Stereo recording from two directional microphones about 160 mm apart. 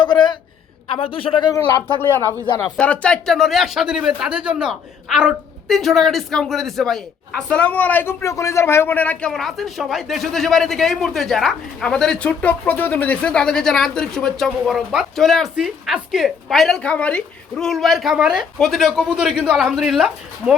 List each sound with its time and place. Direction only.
0.0 s a sound: 30° left (ahead or behind)
0.9 s a man's voice: 35° left (ahead or behind)
2.7 s speech: 10° left (ahead or behind)